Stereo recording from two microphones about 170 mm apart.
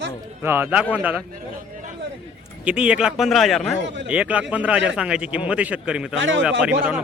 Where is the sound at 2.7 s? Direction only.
5° right (ahead or behind).